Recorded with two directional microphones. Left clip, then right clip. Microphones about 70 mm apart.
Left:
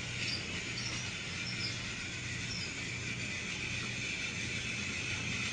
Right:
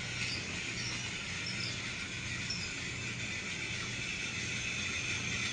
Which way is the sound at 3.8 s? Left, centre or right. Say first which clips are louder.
Even; centre.